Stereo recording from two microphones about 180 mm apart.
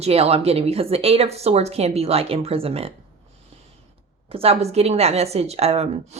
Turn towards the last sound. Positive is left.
turn(degrees=-35)  # may be behind; listen again after turning